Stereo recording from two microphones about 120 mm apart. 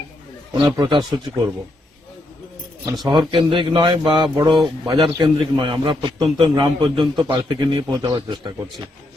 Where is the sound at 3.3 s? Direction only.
45° right (ahead or behind).